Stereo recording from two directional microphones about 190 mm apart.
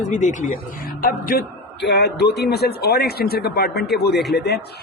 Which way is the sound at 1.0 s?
50° left (ahead or behind).